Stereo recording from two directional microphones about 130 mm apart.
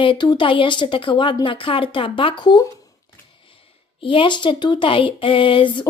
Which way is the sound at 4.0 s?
40° left (ahead or behind).